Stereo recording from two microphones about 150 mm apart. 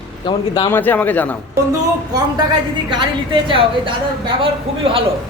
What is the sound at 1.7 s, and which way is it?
A woman's voice, 25° right (ahead or behind).